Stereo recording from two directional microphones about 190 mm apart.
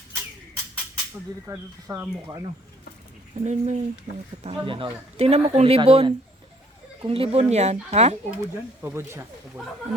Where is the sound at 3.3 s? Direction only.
40° right (ahead or behind).